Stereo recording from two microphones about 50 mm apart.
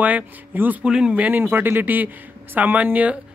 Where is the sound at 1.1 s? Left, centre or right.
Right.